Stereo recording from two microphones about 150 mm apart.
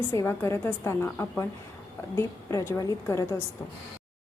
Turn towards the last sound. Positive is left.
turn(degrees=20)  # may be behind; listen again after turning